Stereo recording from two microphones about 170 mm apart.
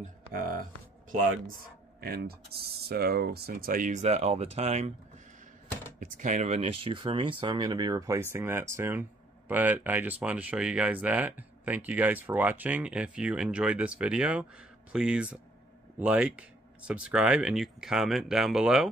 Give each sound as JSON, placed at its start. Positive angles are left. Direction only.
{"t": 0.3, "sound": "speech", "side_deg": -55}
{"t": 2.0, "sound": "speech", "side_deg": -65}
{"t": 5.9, "sound": "speech", "side_deg": -50}